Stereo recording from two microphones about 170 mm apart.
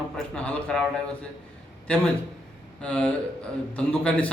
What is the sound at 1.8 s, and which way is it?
A man's voice, 5° left (ahead or behind).